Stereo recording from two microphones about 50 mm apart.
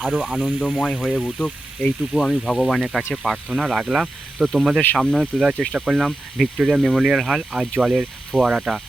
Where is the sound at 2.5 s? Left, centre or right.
Centre.